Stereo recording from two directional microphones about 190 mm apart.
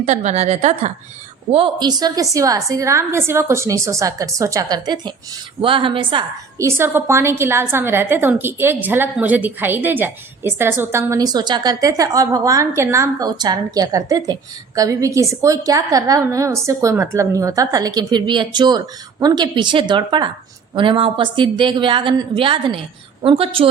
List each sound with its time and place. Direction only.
0.0 s a woman's voice: 35° right (ahead or behind)
6.6 s a woman's voice: 15° right (ahead or behind)